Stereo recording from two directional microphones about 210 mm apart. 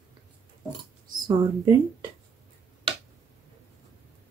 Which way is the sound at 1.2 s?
20° right (ahead or behind).